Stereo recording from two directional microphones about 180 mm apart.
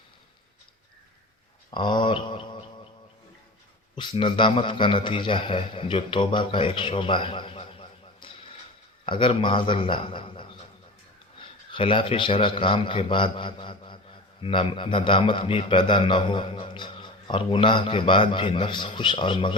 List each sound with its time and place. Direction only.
1.7 s a sound: 25° left (ahead or behind)
3.9 s a man's voice: 25° left (ahead or behind)
11.7 s a man's voice: 30° left (ahead or behind)